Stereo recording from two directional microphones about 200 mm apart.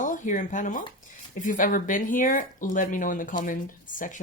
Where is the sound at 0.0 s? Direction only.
40° left (ahead or behind).